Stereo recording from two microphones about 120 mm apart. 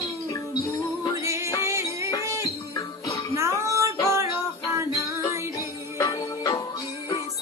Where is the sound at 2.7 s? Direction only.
30° left (ahead or behind).